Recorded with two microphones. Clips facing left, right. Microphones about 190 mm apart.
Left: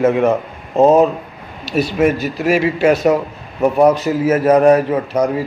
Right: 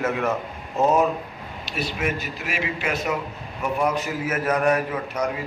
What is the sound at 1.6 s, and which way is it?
A man's voice, 40° left (ahead or behind).